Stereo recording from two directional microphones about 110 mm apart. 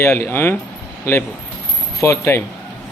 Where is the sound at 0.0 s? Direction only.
25° left (ahead or behind).